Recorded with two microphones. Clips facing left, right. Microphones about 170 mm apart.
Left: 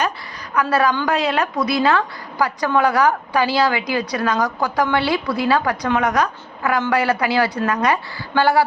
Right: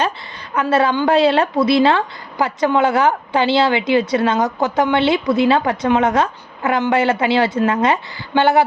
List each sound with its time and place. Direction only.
0.5 s a woman's voice: 25° right (ahead or behind)